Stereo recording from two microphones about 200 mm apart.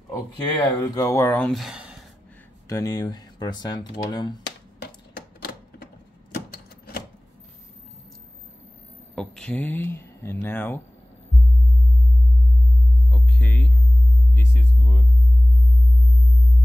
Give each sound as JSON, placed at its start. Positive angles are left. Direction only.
{"t": 0.1, "sound": "speech", "side_deg": 15}
{"t": 2.7, "sound": "speech", "side_deg": 20}
{"t": 4.8, "sound": "typewriter", "side_deg": 50}
{"t": 9.1, "sound": "speech", "side_deg": 5}
{"t": 13.1, "sound": "a sound", "side_deg": 5}
{"t": 14.3, "sound": "sine wave", "side_deg": 10}